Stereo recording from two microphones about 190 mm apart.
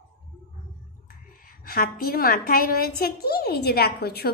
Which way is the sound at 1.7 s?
50° left (ahead or behind).